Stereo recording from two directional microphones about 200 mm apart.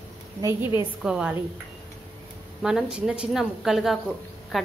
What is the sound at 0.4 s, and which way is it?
Speech, 15° right (ahead or behind).